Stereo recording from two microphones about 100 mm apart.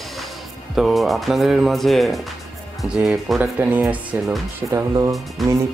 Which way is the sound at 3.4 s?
15° right (ahead or behind).